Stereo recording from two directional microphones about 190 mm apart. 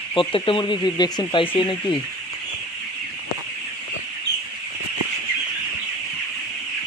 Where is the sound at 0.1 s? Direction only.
25° left (ahead or behind).